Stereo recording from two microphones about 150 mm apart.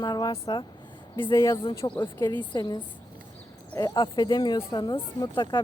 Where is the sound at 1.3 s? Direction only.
15° left (ahead or behind).